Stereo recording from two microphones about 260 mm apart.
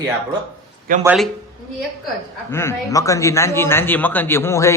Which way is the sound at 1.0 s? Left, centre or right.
Centre.